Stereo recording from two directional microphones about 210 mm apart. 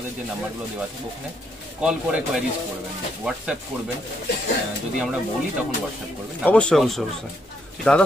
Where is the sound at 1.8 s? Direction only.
5° right (ahead or behind).